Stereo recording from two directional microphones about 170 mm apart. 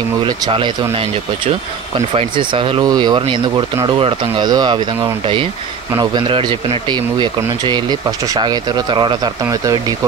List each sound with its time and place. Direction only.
0.2 s speech: 30° right (ahead or behind)
2.1 s speech: 30° right (ahead or behind)